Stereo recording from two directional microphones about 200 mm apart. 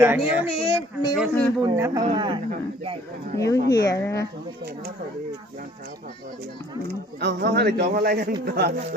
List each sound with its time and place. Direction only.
0.0 s speech: 10° right (ahead or behind)
0.4 s speech: 30° left (ahead or behind)
1.1 s a man's voice: 5° right (ahead or behind)
1.6 s speech: 15° right (ahead or behind)
3.3 s speech: 15° left (ahead or behind)
7.2 s a man's voice: 60° right (ahead or behind)